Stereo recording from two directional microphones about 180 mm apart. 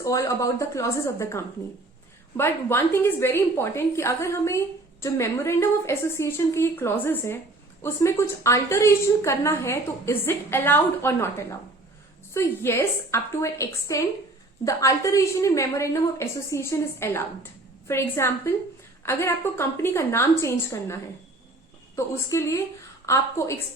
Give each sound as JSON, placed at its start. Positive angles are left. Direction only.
{"t": 0.0, "sound": "a woman's voice", "side_deg": 15}